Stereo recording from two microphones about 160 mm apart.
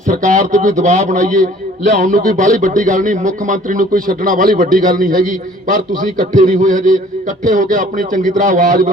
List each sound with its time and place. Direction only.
0.1 s a man's voice: 50° right (ahead or behind)